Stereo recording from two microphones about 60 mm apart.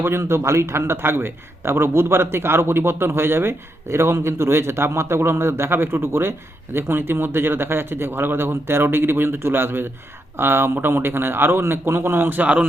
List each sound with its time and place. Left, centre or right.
0.0 s a man's voice: right